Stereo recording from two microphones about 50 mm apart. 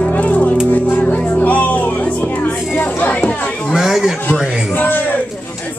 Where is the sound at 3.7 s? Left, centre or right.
Centre.